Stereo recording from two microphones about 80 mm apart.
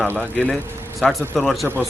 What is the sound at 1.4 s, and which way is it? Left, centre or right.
Speech, centre.